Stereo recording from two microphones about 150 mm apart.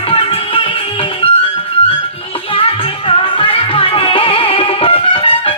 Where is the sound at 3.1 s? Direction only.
35° left (ahead or behind).